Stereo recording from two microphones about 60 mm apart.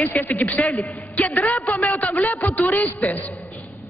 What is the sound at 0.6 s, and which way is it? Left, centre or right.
Speech, left.